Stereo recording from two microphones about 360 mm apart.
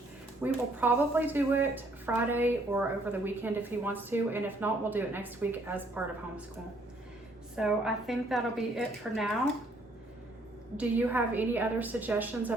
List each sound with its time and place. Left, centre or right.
0.4 s speech: centre
7.5 s speech: centre
10.8 s speech: centre